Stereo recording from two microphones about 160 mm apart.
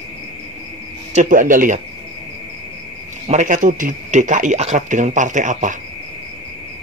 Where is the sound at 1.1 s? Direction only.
50° right (ahead or behind).